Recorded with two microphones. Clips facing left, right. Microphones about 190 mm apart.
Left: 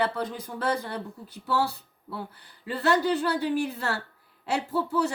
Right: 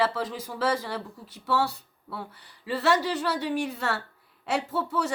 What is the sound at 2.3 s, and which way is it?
Speech, 65° right (ahead or behind).